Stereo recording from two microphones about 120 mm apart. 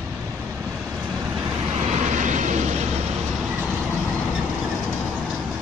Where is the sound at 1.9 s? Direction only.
90° right.